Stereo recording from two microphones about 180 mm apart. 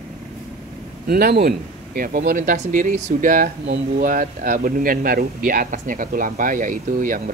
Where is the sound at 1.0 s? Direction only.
60° right (ahead or behind).